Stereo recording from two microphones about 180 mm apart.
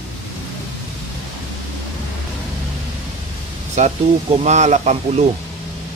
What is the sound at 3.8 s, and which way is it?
Speech, 40° right (ahead or behind).